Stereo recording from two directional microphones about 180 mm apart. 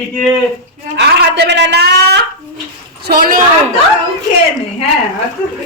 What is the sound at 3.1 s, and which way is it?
Speech, 50° right (ahead or behind).